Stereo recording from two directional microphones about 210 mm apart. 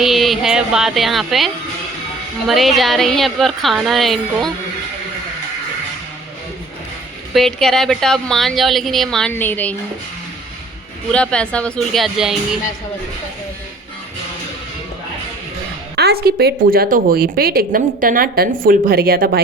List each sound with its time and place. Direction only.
0.0 s a woman's voice: centre (ahead or behind)
2.5 s a woman's voice: centre (ahead or behind)
7.3 s a woman's voice: centre (ahead or behind)
11.1 s a woman's voice: 5° left (ahead or behind)
16.0 s a woman's voice: 50° right (ahead or behind)